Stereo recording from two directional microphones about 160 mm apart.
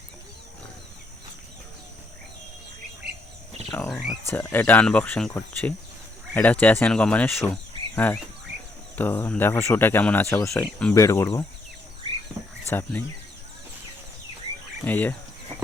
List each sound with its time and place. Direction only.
3.7 s speech: 10° left (ahead or behind)
7.5 s insect: 10° left (ahead or behind)
9.0 s speech: 10° left (ahead or behind)
12.7 s speech: 10° left (ahead or behind)
14.8 s speech: 10° left (ahead or behind)